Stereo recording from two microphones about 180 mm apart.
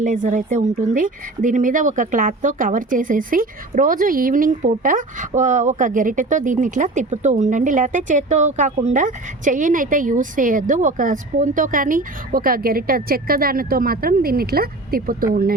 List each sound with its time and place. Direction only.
0.0 s speech: 45° right (ahead or behind)